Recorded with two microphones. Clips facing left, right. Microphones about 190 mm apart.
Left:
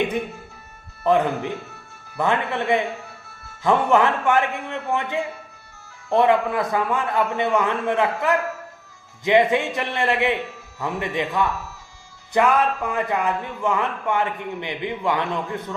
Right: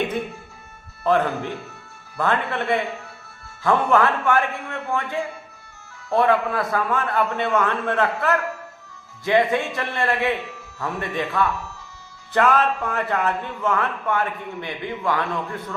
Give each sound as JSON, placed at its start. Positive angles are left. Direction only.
{"t": 1.0, "sound": "a man's voice", "side_deg": 15}